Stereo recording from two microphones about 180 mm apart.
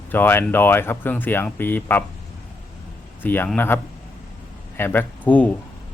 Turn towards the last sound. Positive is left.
turn(degrees=10)  # may be behind; listen again after turning